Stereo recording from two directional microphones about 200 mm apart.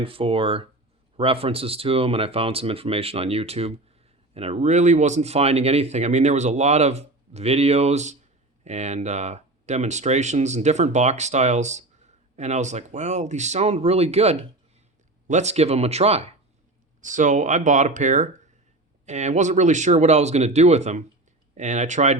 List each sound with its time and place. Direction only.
0.0 s speech: 25° right (ahead or behind)